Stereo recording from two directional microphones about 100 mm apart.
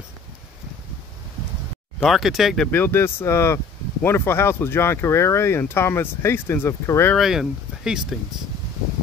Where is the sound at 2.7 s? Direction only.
25° left (ahead or behind).